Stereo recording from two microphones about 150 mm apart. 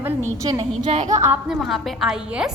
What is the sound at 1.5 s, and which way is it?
A woman's voice, centre (ahead or behind).